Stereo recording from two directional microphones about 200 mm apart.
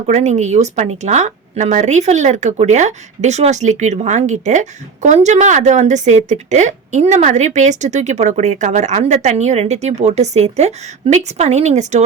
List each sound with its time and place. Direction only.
0.1 s speech: 35° right (ahead or behind)